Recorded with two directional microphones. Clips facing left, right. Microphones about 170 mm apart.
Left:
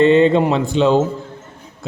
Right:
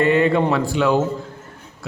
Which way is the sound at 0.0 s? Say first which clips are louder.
Left 5 dB; 25° left (ahead or behind).